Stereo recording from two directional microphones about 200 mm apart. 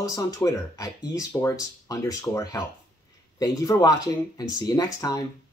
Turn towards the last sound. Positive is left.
turn(degrees=20)  # may be behind; listen again after turning